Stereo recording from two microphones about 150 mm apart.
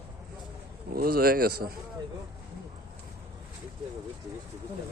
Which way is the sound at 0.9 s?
80° right.